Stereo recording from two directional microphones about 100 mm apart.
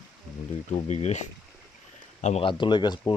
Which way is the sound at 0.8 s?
90° left.